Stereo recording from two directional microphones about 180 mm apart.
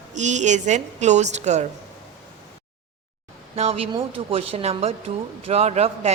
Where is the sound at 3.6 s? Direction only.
35° right (ahead or behind).